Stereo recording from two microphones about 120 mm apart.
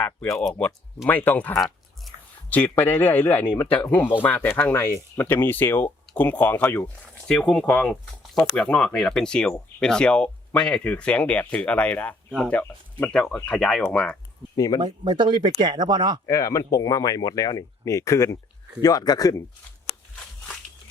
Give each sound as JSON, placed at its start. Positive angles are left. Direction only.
{"t": 0.0, "sound": "speech", "side_deg": 10}
{"t": 14.5, "sound": "speech", "side_deg": 30}
{"t": 14.8, "sound": "speech", "side_deg": -40}
{"t": 16.2, "sound": "speech", "side_deg": 25}